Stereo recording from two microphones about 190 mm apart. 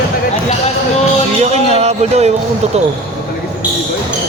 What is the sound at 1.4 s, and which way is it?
Music, 35° right (ahead or behind).